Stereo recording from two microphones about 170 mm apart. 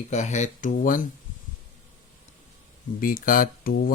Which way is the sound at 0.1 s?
45° left (ahead or behind).